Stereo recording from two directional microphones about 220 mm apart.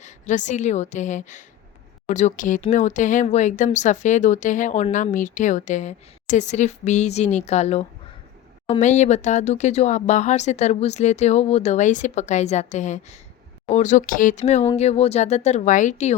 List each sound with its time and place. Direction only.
0.0 s speech: 35° left (ahead or behind)